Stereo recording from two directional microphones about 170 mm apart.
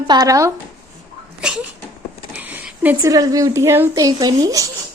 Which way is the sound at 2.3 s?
10° right (ahead or behind).